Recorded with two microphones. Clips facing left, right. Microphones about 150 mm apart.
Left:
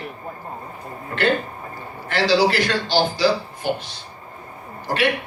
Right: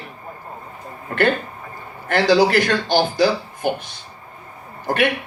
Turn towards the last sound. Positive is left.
turn(degrees=-50)  # may be behind; listen again after turning